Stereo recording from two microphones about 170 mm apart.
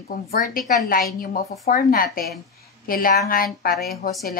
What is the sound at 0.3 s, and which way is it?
A woman's voice, 55° left (ahead or behind).